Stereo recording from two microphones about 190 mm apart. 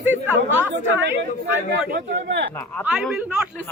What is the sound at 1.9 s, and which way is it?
Speech, 65° right (ahead or behind).